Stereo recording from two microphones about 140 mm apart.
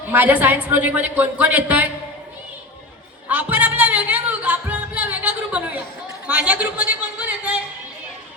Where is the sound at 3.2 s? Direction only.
10° right (ahead or behind).